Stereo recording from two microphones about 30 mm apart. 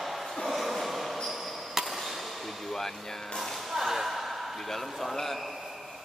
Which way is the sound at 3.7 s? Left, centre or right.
Centre.